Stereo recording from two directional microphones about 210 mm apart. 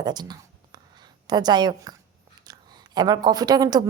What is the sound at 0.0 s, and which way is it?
Speech, 20° right (ahead or behind).